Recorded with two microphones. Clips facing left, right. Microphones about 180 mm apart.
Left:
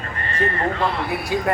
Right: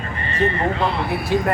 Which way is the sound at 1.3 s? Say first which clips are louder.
Right 4 dB; 5° left (ahead or behind).